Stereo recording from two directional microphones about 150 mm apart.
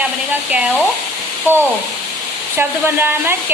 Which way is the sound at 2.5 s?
15° right (ahead or behind).